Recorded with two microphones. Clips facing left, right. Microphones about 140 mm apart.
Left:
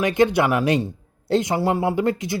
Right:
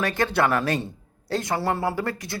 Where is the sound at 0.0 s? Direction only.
20° left (ahead or behind).